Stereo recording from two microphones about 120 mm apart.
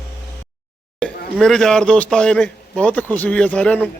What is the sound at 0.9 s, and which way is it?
Speech, 5° left (ahead or behind).